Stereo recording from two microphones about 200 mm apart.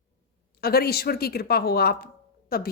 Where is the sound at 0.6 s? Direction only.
50° left (ahead or behind).